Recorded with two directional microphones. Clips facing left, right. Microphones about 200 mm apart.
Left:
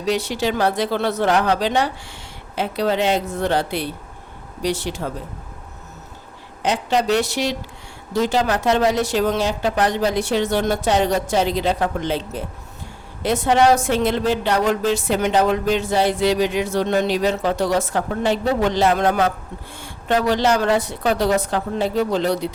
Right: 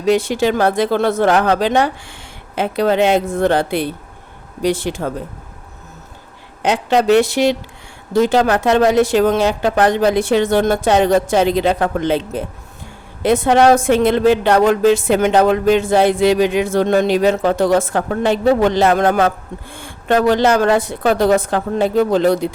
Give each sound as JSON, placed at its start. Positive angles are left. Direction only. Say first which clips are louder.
{"t": 0.0, "sound": "a woman's voice", "louder": "right 6 dB", "side_deg": -50}
{"t": 6.6, "sound": "a woman's voice", "louder": "right 5 dB", "side_deg": -60}